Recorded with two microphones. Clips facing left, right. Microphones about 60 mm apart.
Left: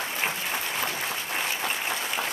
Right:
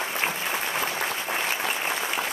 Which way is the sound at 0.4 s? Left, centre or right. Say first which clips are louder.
Right 2 dB; centre.